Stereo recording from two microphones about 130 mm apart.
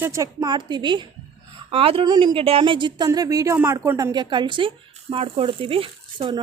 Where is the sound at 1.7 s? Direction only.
45° right (ahead or behind).